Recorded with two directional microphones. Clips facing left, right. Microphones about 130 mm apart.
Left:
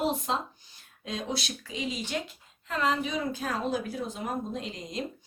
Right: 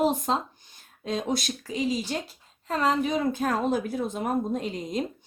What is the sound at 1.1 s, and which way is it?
Speech, 45° right (ahead or behind).